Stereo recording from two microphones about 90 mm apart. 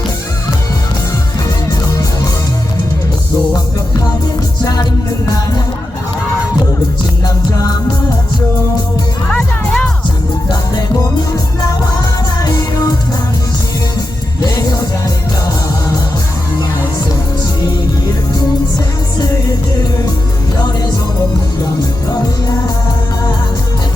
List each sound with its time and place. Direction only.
4.6 s music: 45° left (ahead or behind)
9.3 s music: 15° left (ahead or behind)
14.4 s music: 45° left (ahead or behind)